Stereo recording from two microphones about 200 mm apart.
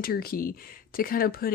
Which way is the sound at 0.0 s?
50° left (ahead or behind).